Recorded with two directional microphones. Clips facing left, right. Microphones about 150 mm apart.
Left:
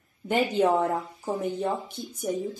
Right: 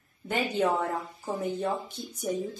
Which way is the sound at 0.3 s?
25° left (ahead or behind).